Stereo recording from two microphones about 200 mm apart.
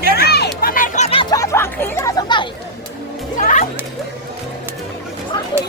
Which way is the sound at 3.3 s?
40° left (ahead or behind).